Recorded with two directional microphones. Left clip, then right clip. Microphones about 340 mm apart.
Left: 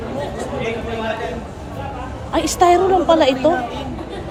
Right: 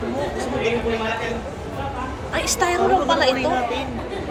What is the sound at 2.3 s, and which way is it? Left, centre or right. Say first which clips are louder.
Speech: left 7 dB; centre.